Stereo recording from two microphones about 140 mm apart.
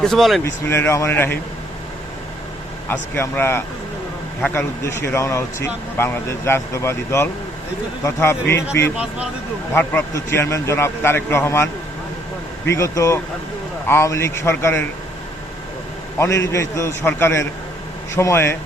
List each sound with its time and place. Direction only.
0.0 s speech: centre (ahead or behind)
0.4 s a man's voice: 15° left (ahead or behind)
2.8 s a man's voice: 15° left (ahead or behind)
9.0 s speech: 10° right (ahead or behind)
9.7 s a man's voice: 15° left (ahead or behind)
12.7 s speech: 20° left (ahead or behind)
16.1 s speech: 20° left (ahead or behind)